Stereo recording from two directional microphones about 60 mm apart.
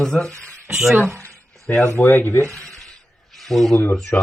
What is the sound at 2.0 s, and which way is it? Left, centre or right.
Speech, left.